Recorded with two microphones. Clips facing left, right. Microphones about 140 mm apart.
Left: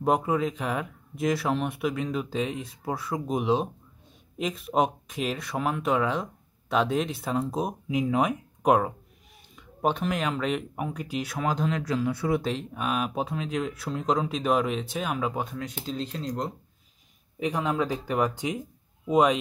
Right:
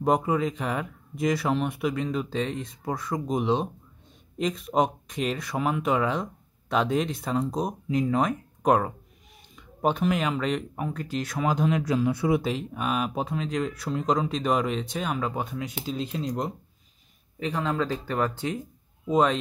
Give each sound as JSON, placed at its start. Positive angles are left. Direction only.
{"t": 0.0, "sound": "speech", "side_deg": 0}
{"t": 11.3, "sound": "speech", "side_deg": -5}
{"t": 11.6, "sound": "speech", "side_deg": -15}
{"t": 12.4, "sound": "speech", "side_deg": -5}
{"t": 15.8, "sound": "speech", "side_deg": -10}
{"t": 17.4, "sound": "speech", "side_deg": 15}